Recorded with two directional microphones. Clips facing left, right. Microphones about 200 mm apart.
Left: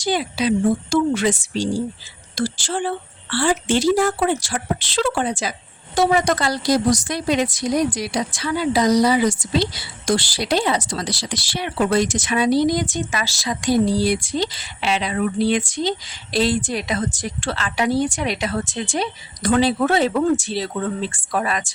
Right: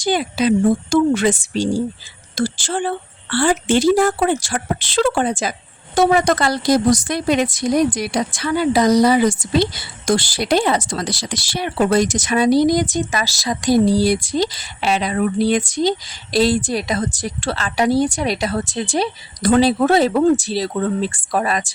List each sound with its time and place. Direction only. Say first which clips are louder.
0.0 s a woman's voice: right 3 dB; 50° right (ahead or behind)